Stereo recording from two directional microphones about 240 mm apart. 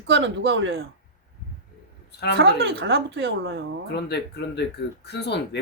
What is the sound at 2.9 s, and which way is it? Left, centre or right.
Speech, right.